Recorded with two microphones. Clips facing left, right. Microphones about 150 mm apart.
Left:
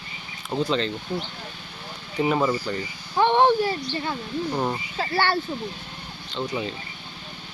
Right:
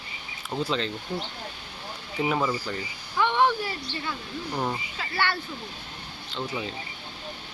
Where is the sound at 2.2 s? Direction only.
20° left (ahead or behind).